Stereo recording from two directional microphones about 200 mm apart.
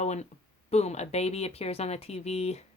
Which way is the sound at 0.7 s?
35° left (ahead or behind).